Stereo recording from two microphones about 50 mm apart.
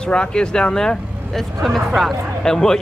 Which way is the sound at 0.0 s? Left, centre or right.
Centre.